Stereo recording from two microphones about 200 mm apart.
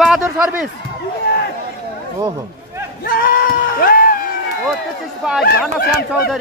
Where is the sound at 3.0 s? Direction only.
45° left (ahead or behind).